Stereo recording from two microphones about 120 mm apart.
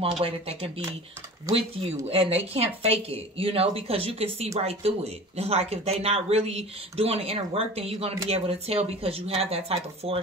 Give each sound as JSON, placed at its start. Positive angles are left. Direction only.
{"t": 0.2, "sound": "speech", "side_deg": -45}